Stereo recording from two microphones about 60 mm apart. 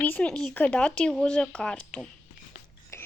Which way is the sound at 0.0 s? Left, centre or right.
Left.